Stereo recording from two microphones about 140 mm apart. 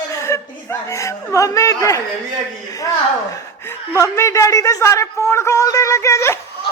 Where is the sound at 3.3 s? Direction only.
20° left (ahead or behind).